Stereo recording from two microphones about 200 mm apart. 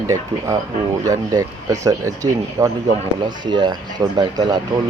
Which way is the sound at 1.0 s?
15° right (ahead or behind).